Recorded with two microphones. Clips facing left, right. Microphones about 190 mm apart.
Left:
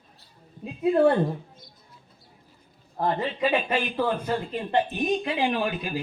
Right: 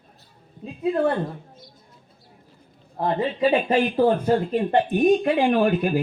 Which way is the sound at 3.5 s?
40° right (ahead or behind).